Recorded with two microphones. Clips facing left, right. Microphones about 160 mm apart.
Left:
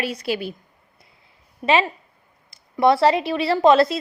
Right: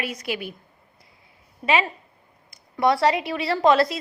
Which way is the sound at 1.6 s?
25° left (ahead or behind).